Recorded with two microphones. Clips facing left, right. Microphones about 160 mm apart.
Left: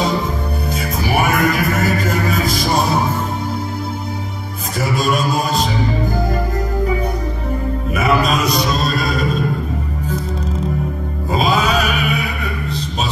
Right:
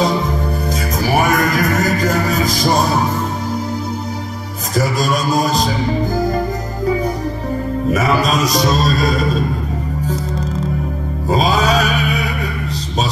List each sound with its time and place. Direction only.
0.7 s music: 40° right (ahead or behind)
4.7 s music: 40° right (ahead or behind)
7.9 s music: 40° right (ahead or behind)
11.2 s music: 35° right (ahead or behind)